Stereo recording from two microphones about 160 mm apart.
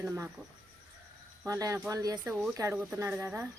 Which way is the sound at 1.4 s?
20° right (ahead or behind).